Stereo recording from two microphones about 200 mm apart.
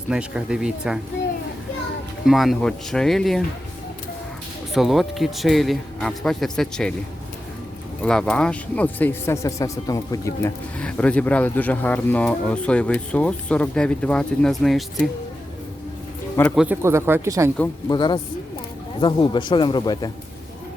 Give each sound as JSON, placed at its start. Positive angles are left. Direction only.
{"t": 0.1, "sound": "speech", "side_deg": -5}
{"t": 2.2, "sound": "speech", "side_deg": 0}
{"t": 4.7, "sound": "speech", "side_deg": 0}
{"t": 8.0, "sound": "speech", "side_deg": 5}
{"t": 16.6, "sound": "speech", "side_deg": -10}
{"t": 17.8, "sound": "a man's voice", "side_deg": 20}